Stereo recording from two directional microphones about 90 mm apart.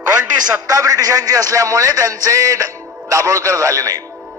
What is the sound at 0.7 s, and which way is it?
A man's voice, 40° right (ahead or behind).